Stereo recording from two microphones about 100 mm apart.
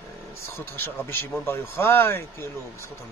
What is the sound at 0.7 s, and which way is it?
Speech, 20° left (ahead or behind).